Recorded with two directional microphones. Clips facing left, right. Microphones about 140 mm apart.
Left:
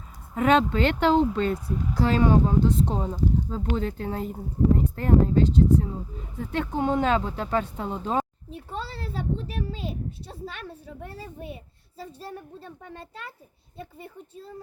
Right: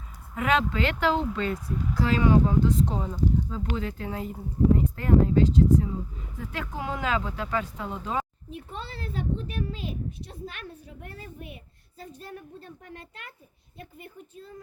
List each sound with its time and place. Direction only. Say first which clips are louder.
0.3 s speech: left 5 dB; 30° left (ahead or behind)